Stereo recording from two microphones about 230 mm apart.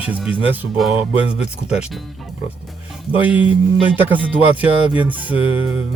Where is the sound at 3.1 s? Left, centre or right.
Centre.